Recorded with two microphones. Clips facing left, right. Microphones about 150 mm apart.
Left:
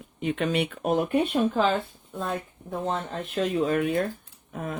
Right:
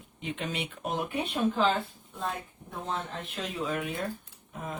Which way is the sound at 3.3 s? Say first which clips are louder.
Left 9 dB; 55° left (ahead or behind).